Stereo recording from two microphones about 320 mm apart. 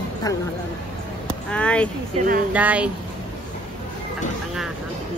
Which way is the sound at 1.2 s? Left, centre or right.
Centre.